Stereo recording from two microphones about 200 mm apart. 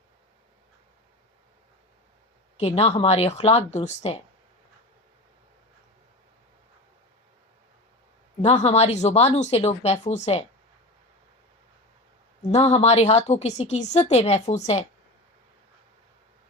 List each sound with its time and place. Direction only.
2.6 s a woman's voice: 30° left (ahead or behind)
8.4 s a woman's voice: 35° left (ahead or behind)
12.5 s a woman's voice: 35° left (ahead or behind)